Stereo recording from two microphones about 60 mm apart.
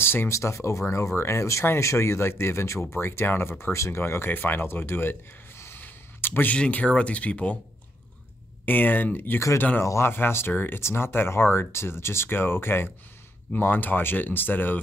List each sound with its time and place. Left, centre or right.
0.0 s a sound: left
0.3 s speech: left
5.6 s a sound: left
6.5 s speech: left
8.6 s speech: left
10.8 s speech: left